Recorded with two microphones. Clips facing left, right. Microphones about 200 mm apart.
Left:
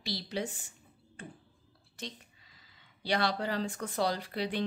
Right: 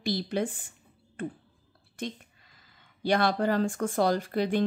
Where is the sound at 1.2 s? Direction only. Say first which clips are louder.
Right 12 dB; 55° right (ahead or behind).